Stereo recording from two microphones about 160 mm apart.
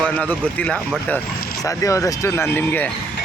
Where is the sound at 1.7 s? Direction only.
20° left (ahead or behind).